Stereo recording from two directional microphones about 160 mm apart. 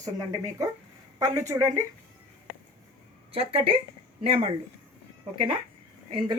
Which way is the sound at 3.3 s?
35° right (ahead or behind).